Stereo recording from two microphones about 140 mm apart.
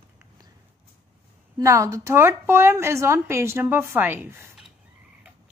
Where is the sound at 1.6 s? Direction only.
20° right (ahead or behind).